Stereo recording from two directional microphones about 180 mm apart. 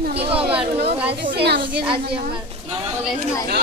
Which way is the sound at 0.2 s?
30° right (ahead or behind).